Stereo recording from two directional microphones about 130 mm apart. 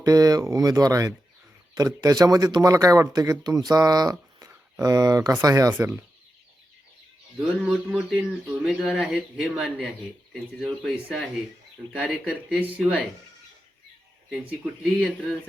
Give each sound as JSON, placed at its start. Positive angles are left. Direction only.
{"t": 0.0, "sound": "speech", "side_deg": -30}
{"t": 7.3, "sound": "speech", "side_deg": -5}
{"t": 14.3, "sound": "speech", "side_deg": -5}